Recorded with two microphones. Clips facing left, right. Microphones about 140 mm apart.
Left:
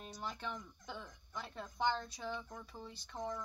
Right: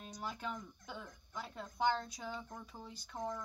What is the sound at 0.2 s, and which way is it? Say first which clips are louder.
Speech: right 1 dB; 10° right (ahead or behind).